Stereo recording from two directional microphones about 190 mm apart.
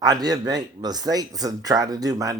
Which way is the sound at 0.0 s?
20° right (ahead or behind).